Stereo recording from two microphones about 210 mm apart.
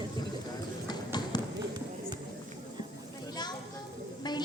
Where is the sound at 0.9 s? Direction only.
20° left (ahead or behind).